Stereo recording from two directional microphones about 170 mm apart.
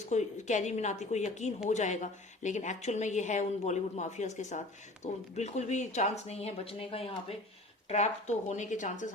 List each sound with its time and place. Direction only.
0.1 s a woman's voice: 45° left (ahead or behind)